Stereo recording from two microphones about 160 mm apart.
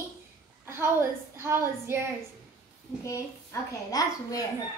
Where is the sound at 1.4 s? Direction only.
15° right (ahead or behind).